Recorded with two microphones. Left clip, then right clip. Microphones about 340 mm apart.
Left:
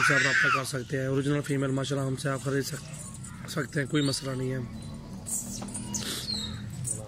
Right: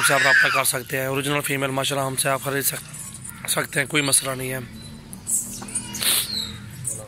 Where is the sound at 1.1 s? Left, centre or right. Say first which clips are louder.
Right 5 dB; centre.